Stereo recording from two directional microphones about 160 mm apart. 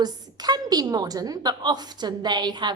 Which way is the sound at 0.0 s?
25° right (ahead or behind).